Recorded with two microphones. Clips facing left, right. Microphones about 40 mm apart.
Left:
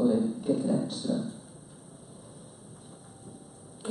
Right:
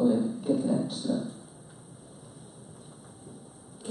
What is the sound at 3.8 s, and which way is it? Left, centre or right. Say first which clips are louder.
Hum: left 2 dB; left.